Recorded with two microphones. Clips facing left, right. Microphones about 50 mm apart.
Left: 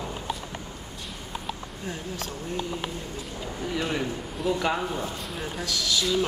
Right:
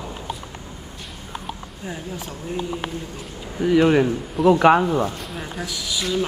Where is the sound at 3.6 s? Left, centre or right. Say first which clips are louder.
Right 13 dB; right.